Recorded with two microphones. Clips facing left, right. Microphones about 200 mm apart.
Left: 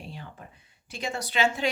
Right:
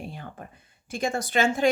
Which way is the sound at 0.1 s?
50° right (ahead or behind).